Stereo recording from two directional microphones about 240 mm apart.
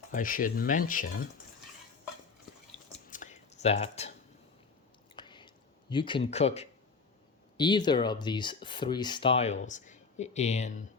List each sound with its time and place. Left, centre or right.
0.1 s speech: left
3.1 s a sound: left
5.1 s chewing: centre
5.9 s speech: centre